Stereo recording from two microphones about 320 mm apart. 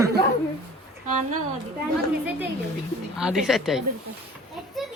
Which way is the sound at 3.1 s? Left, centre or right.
Centre.